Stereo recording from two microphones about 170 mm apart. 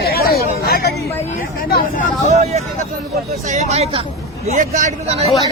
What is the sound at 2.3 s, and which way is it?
Speech, 40° right (ahead or behind).